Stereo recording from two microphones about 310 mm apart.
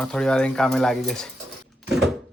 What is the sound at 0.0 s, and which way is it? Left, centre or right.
Speech, centre.